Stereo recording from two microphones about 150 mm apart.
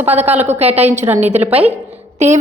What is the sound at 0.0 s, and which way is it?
Speech, 45° right (ahead or behind).